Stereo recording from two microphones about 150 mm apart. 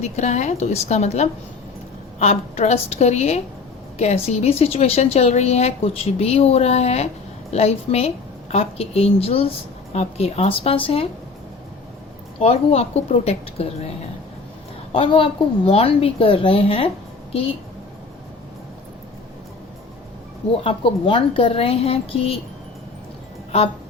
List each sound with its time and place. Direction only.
0.0 s a woman's voice: 50° left (ahead or behind)
12.4 s speech: 45° left (ahead or behind)
14.9 s a woman's voice: 35° left (ahead or behind)
20.7 s a woman's voice: 35° left (ahead or behind)